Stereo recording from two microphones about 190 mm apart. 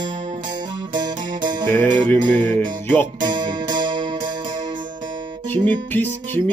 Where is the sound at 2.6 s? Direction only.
10° left (ahead or behind).